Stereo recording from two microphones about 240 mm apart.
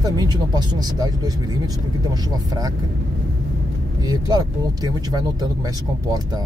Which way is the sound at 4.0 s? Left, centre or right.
Centre.